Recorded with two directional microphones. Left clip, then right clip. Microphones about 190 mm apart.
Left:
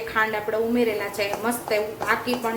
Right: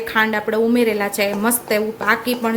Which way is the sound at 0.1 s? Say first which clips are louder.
Right 5 dB; 60° right (ahead or behind).